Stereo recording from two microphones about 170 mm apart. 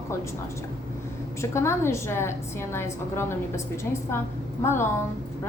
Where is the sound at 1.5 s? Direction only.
15° left (ahead or behind).